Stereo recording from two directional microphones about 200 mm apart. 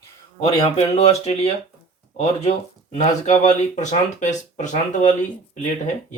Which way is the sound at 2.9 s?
35° left (ahead or behind).